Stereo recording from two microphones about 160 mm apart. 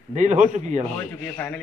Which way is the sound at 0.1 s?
50° right (ahead or behind).